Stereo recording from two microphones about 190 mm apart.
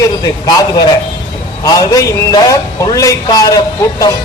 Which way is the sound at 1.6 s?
20° left (ahead or behind).